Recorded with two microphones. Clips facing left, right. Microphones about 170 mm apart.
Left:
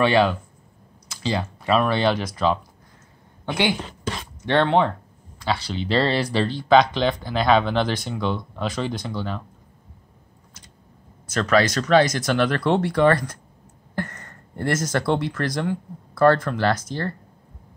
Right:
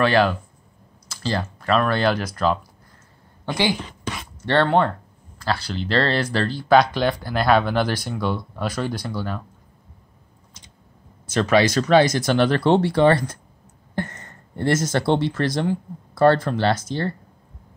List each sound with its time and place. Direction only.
0.0 s speech: centre (ahead or behind)
4.5 s speech: centre (ahead or behind)
11.2 s speech: 30° right (ahead or behind)